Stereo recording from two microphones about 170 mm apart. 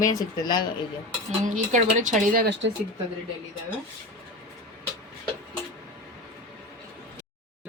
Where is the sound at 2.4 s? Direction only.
75° right (ahead or behind).